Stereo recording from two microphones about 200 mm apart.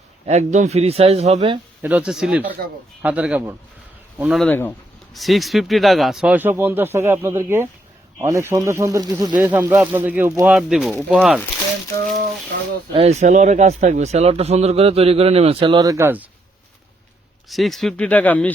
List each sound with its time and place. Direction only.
0.3 s speech: 35° right (ahead or behind)
1.8 s speech: 5° right (ahead or behind)
12.9 s speech: 30° right (ahead or behind); by 16.2 s 10° right (ahead or behind)
17.5 s speech: centre (ahead or behind)